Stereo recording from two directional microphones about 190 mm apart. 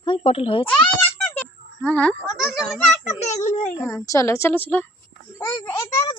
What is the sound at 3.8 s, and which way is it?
A woman's voice, 15° left (ahead or behind).